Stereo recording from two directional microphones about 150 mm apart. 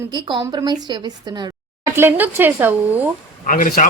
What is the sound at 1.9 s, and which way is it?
A woman's voice, 15° right (ahead or behind).